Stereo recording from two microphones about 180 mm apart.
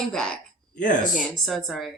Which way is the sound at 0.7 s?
45° left (ahead or behind).